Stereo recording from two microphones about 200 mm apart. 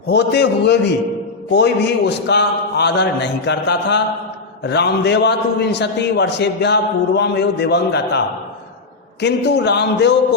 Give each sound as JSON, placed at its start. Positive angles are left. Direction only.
{"t": 0.1, "sound": "a man's voice", "side_deg": 60}
{"t": 9.2, "sound": "a man's voice", "side_deg": 60}